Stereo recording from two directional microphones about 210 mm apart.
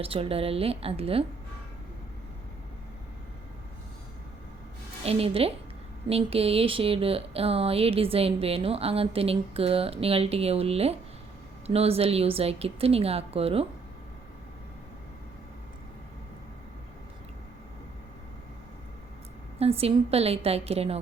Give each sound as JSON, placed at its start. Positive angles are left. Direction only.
{"t": 0.0, "sound": "speech", "side_deg": -25}
{"t": 5.0, "sound": "speech", "side_deg": -25}
{"t": 19.5, "sound": "speech", "side_deg": -30}